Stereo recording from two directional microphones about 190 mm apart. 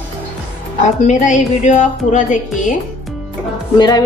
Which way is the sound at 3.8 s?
20° left (ahead or behind).